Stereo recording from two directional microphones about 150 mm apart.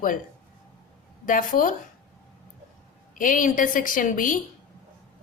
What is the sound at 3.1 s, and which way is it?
A woman's voice, 60° left (ahead or behind).